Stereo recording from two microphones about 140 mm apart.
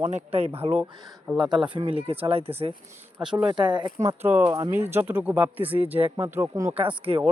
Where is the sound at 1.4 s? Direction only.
35° right (ahead or behind).